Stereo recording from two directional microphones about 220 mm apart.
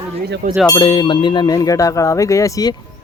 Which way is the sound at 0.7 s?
20° left (ahead or behind).